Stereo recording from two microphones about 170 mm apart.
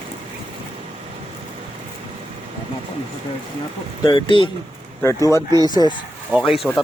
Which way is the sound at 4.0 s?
30° left (ahead or behind).